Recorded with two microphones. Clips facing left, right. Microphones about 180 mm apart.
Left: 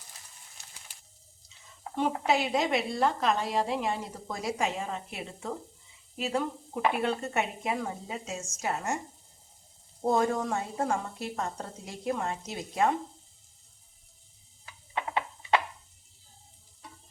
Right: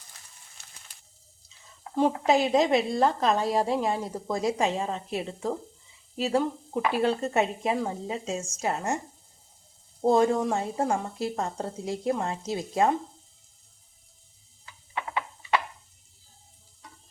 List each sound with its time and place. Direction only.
2.0 s a woman's voice: 40° right (ahead or behind)
10.0 s speech: 30° right (ahead or behind)
14.6 s a sound: 20° left (ahead or behind)